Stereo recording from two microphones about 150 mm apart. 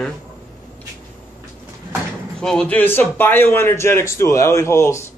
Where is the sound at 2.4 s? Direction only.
5° left (ahead or behind).